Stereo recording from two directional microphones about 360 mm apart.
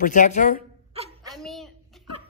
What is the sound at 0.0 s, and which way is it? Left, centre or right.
Speech, left.